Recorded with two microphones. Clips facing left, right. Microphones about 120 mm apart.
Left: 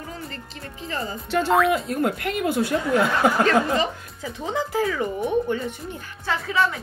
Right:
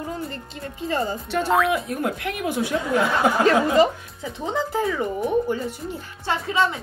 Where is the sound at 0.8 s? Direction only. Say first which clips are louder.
Right 6 dB; 30° right (ahead or behind).